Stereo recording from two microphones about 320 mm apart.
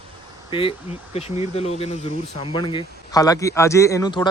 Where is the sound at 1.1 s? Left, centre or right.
Centre.